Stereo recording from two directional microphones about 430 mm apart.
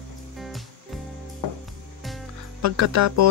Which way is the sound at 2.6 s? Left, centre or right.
Right.